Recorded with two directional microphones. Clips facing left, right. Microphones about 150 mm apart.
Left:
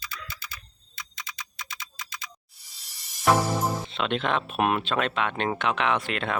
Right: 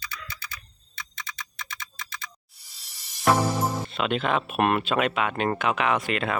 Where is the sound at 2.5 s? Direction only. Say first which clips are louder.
Even; centre (ahead or behind).